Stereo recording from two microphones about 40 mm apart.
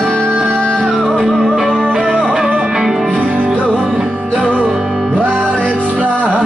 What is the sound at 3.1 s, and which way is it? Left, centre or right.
Music, right.